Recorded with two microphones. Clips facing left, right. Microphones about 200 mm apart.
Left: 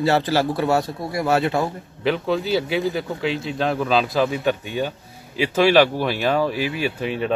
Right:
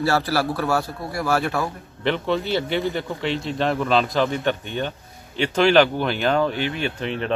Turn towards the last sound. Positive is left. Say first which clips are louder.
# left 2 dB
turn(degrees=5)  # may be behind; listen again after turning